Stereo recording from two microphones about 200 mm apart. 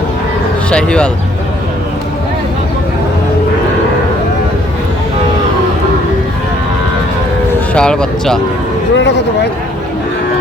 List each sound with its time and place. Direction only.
0.7 s speech: 5° left (ahead or behind)
7.7 s speech: 5° left (ahead or behind)
9.0 s a sound: 60° left (ahead or behind)